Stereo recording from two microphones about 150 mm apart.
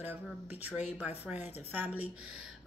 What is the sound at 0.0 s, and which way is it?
Speech, 10° right (ahead or behind).